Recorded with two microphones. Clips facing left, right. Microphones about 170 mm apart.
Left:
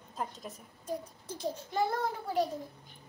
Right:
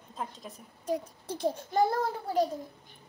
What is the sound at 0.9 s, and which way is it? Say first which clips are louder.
Speech: right 6 dB; 60° right (ahead or behind).